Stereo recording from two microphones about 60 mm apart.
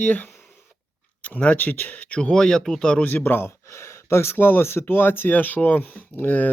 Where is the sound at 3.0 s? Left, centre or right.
Left.